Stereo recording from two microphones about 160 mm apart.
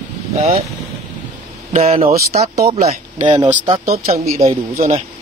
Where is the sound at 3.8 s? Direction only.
70° right (ahead or behind).